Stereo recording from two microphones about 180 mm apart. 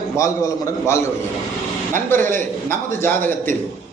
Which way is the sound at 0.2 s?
15° left (ahead or behind).